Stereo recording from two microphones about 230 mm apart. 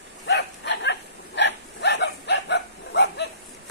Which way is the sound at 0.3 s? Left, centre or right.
Left.